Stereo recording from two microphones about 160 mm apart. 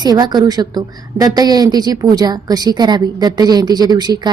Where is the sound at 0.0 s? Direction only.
25° right (ahead or behind).